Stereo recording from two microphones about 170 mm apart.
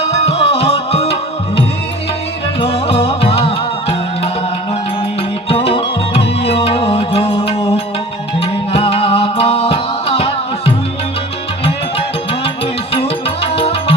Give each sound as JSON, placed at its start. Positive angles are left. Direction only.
{"t": 0.0, "sound": "music", "side_deg": 40}
{"t": 2.6, "sound": "music", "side_deg": 35}
{"t": 5.5, "sound": "music", "side_deg": 35}
{"t": 12.9, "sound": "music", "side_deg": 35}